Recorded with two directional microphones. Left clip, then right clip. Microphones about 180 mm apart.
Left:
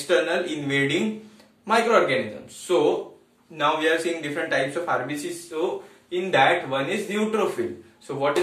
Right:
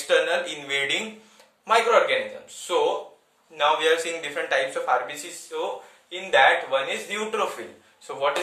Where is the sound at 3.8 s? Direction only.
50° right (ahead or behind).